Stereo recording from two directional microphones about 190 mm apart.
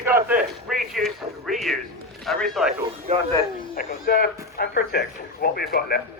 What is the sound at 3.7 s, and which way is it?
Speech, 50° left (ahead or behind).